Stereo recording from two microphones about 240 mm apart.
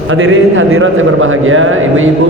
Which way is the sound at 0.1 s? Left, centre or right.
Right.